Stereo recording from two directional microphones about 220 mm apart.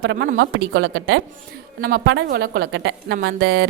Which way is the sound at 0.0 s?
55° right (ahead or behind).